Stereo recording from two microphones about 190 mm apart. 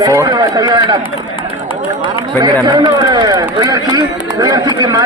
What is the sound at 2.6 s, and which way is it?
Speech, 20° right (ahead or behind).